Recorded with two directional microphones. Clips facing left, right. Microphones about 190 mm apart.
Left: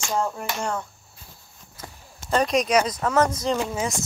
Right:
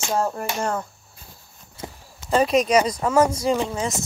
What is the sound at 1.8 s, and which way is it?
Walk, 25° right (ahead or behind).